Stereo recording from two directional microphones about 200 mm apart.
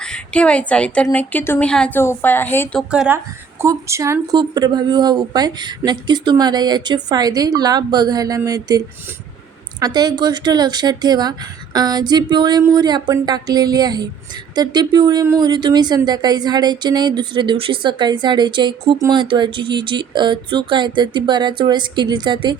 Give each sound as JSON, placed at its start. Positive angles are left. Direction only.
{"t": 0.0, "sound": "a woman's voice", "side_deg": 5}
{"t": 2.9, "sound": "a woman's voice", "side_deg": -5}
{"t": 9.8, "sound": "a woman's voice", "side_deg": -20}